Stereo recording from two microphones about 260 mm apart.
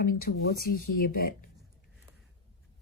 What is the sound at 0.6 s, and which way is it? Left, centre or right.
Speech, left.